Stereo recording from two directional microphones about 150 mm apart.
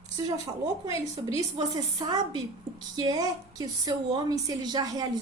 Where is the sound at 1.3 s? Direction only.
30° right (ahead or behind).